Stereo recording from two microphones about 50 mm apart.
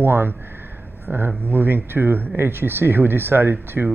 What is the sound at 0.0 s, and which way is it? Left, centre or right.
Speech, right.